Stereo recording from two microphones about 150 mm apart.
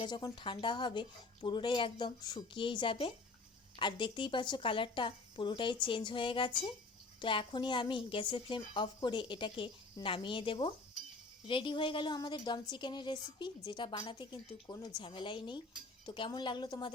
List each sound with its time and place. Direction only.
0.0 s a woman's voice: 30° left (ahead or behind)